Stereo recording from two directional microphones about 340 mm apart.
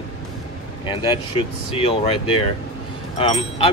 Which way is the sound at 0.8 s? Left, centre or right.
Centre.